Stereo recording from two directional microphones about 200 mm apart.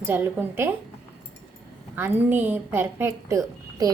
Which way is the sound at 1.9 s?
10° right (ahead or behind).